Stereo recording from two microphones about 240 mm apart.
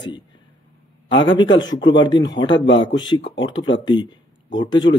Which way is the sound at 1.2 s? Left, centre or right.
Centre.